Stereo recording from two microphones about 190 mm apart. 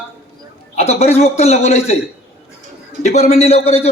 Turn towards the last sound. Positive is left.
turn(degrees=35)  # may be behind; listen again after turning